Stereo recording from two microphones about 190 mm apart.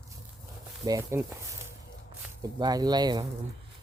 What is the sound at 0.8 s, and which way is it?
Speech, 15° right (ahead or behind).